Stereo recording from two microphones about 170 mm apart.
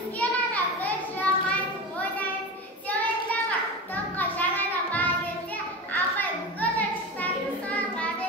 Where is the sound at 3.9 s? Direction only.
10° left (ahead or behind).